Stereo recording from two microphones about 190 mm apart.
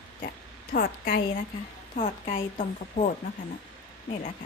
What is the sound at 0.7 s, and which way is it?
Speech, 50° left (ahead or behind).